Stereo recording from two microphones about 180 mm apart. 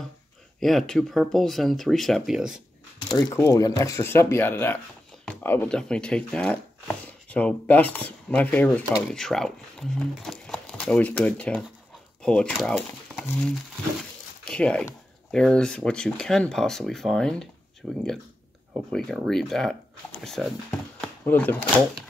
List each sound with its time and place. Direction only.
0.6 s speech: centre (ahead or behind)
3.2 s speech: 20° left (ahead or behind); by 17.5 s 5° left (ahead or behind)
18.9 s speech: centre (ahead or behind)
21.0 s chopping: 10° left (ahead or behind)